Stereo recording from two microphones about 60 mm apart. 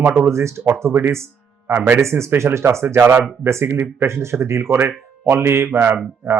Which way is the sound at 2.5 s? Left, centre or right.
Right.